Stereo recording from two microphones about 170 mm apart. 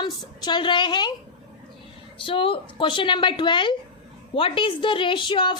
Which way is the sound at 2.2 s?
30° left (ahead or behind).